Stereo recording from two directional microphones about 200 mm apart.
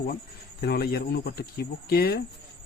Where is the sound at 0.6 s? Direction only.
50° left (ahead or behind).